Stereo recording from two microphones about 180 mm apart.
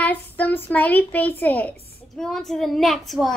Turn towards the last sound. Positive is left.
turn(degrees=0)  # may be behind; listen again after turning